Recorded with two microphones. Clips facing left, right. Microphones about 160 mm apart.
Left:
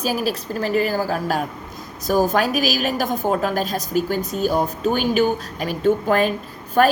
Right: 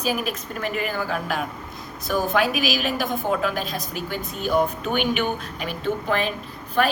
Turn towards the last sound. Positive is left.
turn(degrees=40)  # may be behind; listen again after turning